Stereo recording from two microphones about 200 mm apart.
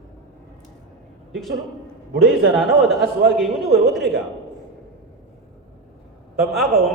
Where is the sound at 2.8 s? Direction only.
Centre (ahead or behind).